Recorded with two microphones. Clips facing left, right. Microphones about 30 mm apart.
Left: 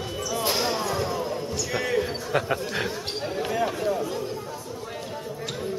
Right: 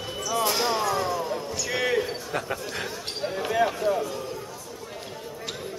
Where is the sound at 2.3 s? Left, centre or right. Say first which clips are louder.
Left 8 dB; centre.